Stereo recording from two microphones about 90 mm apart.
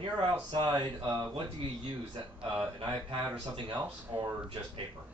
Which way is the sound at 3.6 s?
60° right (ahead or behind).